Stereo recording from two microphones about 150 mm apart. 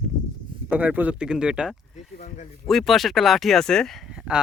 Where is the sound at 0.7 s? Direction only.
10° right (ahead or behind).